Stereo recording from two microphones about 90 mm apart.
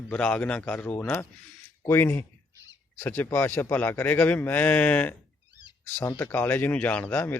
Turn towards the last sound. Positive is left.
turn(degrees=25)  # may be behind; listen again after turning